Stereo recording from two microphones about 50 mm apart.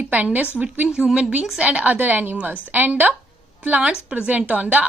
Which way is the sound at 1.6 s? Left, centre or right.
Right.